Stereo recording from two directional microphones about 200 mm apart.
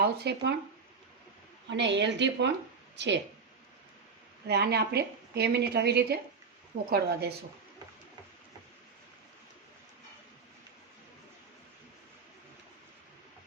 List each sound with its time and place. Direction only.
0.0 s a woman's voice: 55° right (ahead or behind)
1.7 s a woman's voice: 60° right (ahead or behind)
4.4 s a woman's voice: 55° right (ahead or behind)